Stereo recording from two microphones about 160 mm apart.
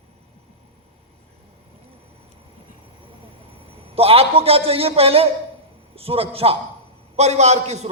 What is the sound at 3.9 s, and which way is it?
A man's voice, 35° right (ahead or behind).